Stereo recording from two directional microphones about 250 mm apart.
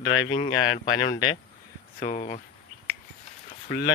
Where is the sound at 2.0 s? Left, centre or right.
Left.